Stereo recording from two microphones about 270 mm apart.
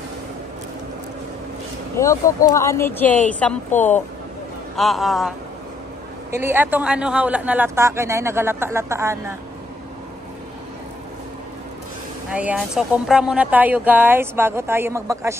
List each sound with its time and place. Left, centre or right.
2.0 s speech: centre
3.7 s speech: left
4.7 s a man's voice: centre
6.3 s speech: centre
12.3 s speech: centre